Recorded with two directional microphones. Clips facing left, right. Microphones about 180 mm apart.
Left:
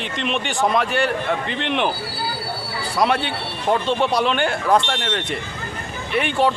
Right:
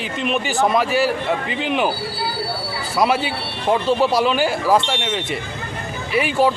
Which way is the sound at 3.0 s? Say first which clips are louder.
Right 1 dB; 5° right (ahead or behind).